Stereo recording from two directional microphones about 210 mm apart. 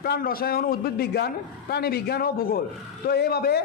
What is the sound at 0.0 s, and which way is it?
A man's voice, 45° left (ahead or behind).